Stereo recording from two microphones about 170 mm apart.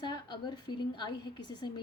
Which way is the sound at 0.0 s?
25° left (ahead or behind).